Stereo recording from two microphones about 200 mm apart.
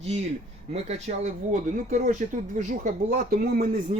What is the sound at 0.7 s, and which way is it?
Speech, 35° right (ahead or behind).